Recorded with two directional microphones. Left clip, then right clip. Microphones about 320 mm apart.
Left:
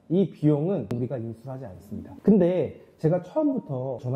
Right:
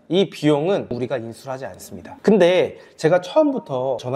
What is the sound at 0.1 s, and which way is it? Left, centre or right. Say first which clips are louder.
Speech: right 6 dB; centre.